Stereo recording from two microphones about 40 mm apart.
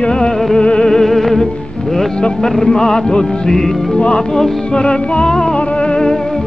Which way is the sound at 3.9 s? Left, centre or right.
Left.